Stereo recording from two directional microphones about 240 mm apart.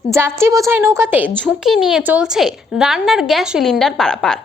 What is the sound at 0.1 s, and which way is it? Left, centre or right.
A woman's voice, centre.